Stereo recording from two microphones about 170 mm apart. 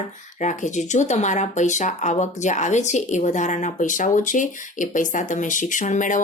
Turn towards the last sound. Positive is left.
turn(degrees=45)  # may be behind; listen again after turning